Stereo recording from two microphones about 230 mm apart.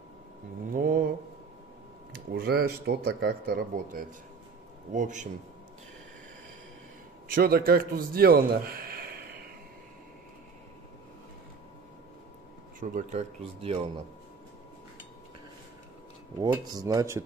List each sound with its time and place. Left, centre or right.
0.7 s mantra: right
2.3 s a man's voice: right
7.3 s a man's voice: right
12.8 s speech: right
16.3 s speech: centre